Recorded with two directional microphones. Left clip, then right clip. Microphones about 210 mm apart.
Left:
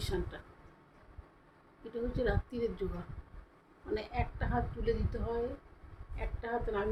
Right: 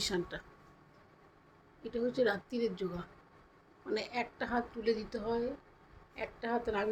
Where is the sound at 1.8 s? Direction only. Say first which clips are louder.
Right 3 dB; 20° right (ahead or behind).